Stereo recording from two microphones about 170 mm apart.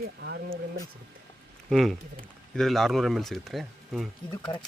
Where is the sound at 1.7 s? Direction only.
Centre (ahead or behind).